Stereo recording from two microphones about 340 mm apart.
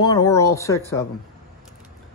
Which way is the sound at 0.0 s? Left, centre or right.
Centre.